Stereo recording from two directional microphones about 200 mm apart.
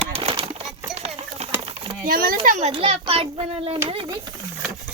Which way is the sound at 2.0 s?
45° right (ahead or behind).